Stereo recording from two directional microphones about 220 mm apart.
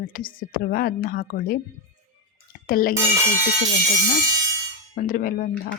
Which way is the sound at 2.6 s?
40° left (ahead or behind).